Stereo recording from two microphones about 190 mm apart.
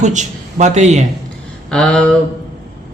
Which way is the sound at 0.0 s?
40° right (ahead or behind).